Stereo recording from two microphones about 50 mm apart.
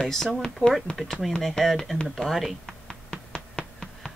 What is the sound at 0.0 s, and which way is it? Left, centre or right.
Speech, centre.